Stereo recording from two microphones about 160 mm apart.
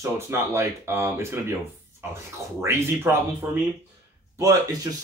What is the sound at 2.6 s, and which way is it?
Speech, 15° right (ahead or behind).